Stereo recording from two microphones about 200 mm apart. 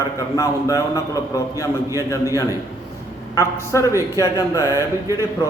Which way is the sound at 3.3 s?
15° left (ahead or behind).